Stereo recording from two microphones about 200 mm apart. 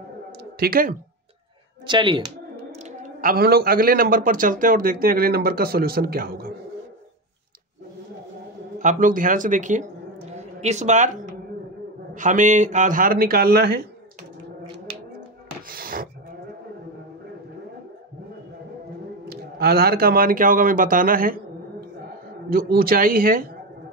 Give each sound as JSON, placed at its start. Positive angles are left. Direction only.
{"t": 0.4, "sound": "a sound", "side_deg": -50}
{"t": 1.9, "sound": "speech", "side_deg": -25}
{"t": 2.7, "sound": "speech", "side_deg": -40}
{"t": 8.7, "sound": "speech", "side_deg": -40}
{"t": 12.1, "sound": "speech", "side_deg": -40}
{"t": 15.7, "sound": "rub", "side_deg": -45}
{"t": 19.2, "sound": "speech", "side_deg": -50}
{"t": 22.5, "sound": "speech", "side_deg": -50}